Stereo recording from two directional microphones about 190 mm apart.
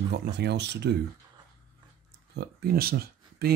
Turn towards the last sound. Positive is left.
turn(degrees=-55)  # may be behind; listen again after turning